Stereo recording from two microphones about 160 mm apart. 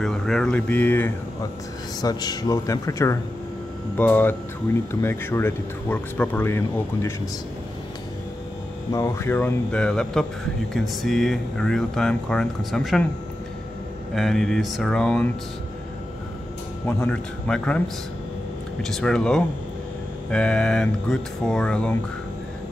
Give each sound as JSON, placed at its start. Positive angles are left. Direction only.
{"t": 0.0, "sound": "speech", "side_deg": 5}
{"t": 2.0, "sound": "speech", "side_deg": 25}
{"t": 8.9, "sound": "speech", "side_deg": 15}
{"t": 14.1, "sound": "speech", "side_deg": 0}
{"t": 16.8, "sound": "speech", "side_deg": 5}